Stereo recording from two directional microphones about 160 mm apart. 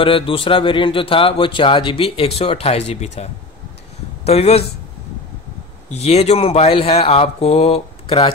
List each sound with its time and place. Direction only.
0.0 s a man's voice: 35° left (ahead or behind)
5.9 s a man's voice: 40° left (ahead or behind)